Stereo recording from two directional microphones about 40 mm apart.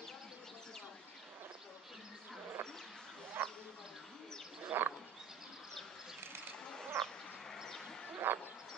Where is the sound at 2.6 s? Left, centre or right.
Right.